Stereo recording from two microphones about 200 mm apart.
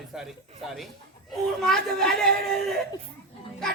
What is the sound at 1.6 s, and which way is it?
Speech, centre (ahead or behind).